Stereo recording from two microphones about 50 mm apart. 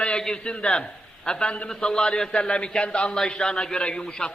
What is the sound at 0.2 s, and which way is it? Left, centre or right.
A man's voice, centre.